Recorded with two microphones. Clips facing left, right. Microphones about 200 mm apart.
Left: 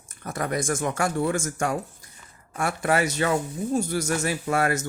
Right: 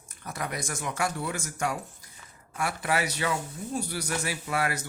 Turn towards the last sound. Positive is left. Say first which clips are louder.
# left 6 dB
turn(degrees=45)  # may be behind; listen again after turning